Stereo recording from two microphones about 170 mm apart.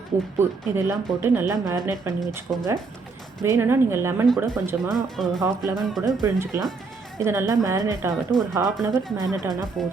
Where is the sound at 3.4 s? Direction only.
15° right (ahead or behind).